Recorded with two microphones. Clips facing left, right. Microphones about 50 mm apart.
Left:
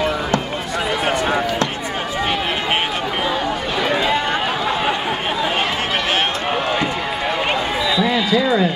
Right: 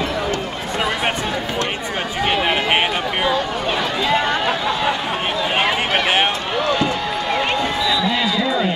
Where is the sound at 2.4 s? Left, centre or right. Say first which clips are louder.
Right 2 dB; right.